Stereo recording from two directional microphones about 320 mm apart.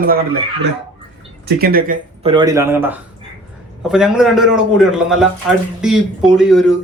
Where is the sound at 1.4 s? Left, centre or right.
Right.